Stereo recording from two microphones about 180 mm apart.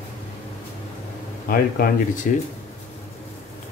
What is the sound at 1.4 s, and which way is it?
Speech, 55° left (ahead or behind).